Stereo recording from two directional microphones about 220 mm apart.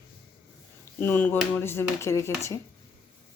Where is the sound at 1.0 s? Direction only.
10° left (ahead or behind).